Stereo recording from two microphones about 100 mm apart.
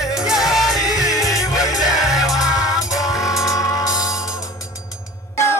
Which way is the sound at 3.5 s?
35° left (ahead or behind).